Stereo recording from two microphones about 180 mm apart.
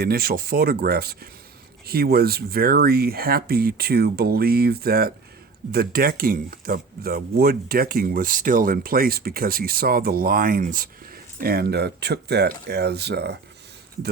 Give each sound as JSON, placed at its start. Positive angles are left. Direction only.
{"t": 0.0, "sound": "speech", "side_deg": -55}